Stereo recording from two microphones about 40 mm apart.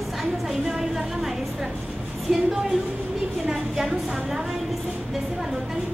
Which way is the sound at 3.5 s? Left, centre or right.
Centre.